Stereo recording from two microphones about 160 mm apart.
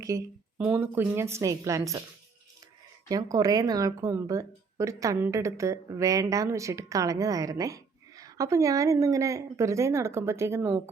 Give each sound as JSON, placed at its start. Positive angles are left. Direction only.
{"t": 0.1, "sound": "speech", "side_deg": -25}
{"t": 0.6, "sound": "a woman's voice", "side_deg": -10}
{"t": 3.1, "sound": "speech", "side_deg": -20}